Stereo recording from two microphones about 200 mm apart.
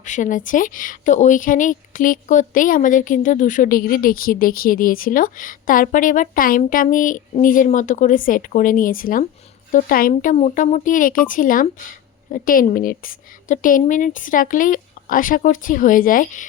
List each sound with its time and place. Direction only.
0.0 s a woman's voice: 40° left (ahead or behind)